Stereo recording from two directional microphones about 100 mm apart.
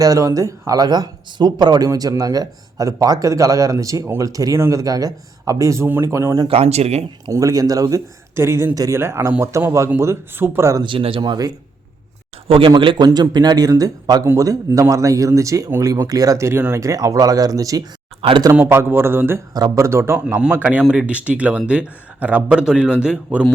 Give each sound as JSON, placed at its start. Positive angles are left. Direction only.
{"t": 0.0, "sound": "speech", "side_deg": -35}
{"t": 6.5, "sound": "speech", "side_deg": -90}
{"t": 7.3, "sound": "speech", "side_deg": -35}
{"t": 10.8, "sound": "speech", "side_deg": -60}
{"t": 12.5, "sound": "a man's voice", "side_deg": -60}
{"t": 13.1, "sound": "speech", "side_deg": -45}
{"t": 18.2, "sound": "speech", "side_deg": -65}
{"t": 18.6, "sound": "speech", "side_deg": -25}
{"t": 19.5, "sound": "speech", "side_deg": -35}
{"t": 20.7, "sound": "a man's voice", "side_deg": -10}